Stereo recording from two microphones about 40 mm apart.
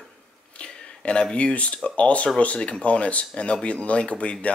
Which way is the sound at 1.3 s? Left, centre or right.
Left.